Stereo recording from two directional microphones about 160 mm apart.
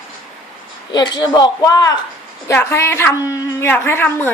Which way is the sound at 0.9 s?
30° left (ahead or behind).